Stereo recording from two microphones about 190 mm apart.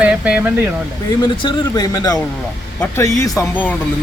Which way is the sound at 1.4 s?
20° left (ahead or behind).